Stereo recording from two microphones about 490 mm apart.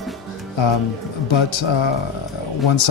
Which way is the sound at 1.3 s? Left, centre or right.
Left.